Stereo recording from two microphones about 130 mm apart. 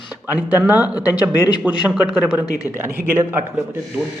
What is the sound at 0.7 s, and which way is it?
Speech, 10° right (ahead or behind).